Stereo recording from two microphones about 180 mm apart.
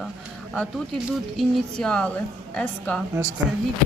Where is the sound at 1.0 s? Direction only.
Centre (ahead or behind).